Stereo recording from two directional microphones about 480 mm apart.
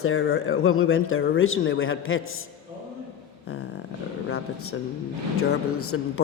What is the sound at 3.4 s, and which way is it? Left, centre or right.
A man's voice, left.